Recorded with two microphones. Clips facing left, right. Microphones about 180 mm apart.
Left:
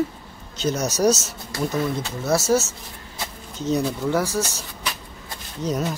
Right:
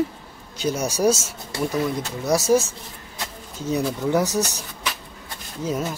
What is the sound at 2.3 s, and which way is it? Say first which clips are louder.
Speech: right 1 dB; 15° right (ahead or behind).